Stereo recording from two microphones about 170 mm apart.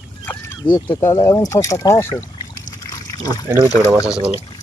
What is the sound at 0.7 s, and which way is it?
Speech, 15° left (ahead or behind).